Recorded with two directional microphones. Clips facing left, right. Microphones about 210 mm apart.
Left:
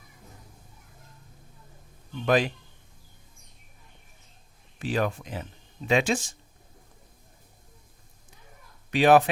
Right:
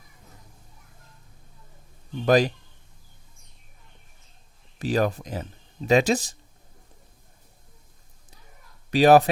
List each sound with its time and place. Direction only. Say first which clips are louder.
2.2 s speech: right 4 dB; 40° right (ahead or behind)
4.8 s speech: right 4 dB; 40° right (ahead or behind)
8.9 s speech: right 3 dB; 40° right (ahead or behind)